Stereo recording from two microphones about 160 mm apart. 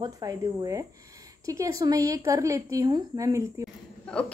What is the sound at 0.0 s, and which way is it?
A woman's voice, 20° right (ahead or behind).